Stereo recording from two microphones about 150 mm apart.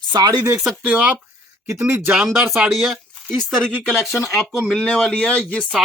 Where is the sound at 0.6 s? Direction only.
5° right (ahead or behind).